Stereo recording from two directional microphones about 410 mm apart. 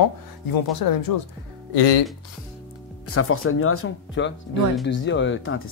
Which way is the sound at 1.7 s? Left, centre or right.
Left.